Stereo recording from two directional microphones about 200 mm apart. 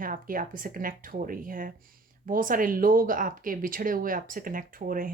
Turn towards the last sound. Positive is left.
turn(degrees=-45)  # may be behind; listen again after turning